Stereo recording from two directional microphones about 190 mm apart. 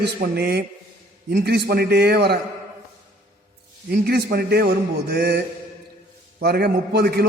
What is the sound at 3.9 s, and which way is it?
A man's voice, 55° right (ahead or behind).